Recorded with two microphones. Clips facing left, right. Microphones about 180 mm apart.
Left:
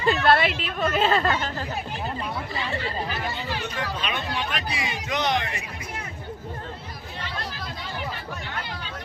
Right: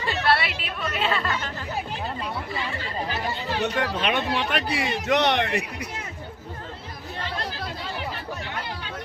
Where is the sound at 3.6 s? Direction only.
65° right (ahead or behind).